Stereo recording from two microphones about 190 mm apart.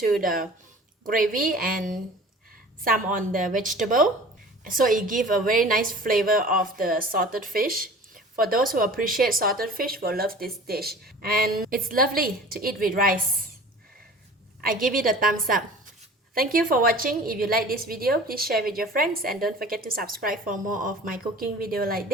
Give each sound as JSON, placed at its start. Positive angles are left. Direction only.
{"t": 0.0, "sound": "a woman's voice", "side_deg": -50}
{"t": 14.9, "sound": "a woman's voice", "side_deg": -45}
{"t": 19.3, "sound": "a woman's voice", "side_deg": 0}
{"t": 19.5, "sound": "a woman's voice", "side_deg": -50}